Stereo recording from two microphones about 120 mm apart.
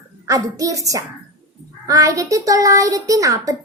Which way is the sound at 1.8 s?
25° right (ahead or behind).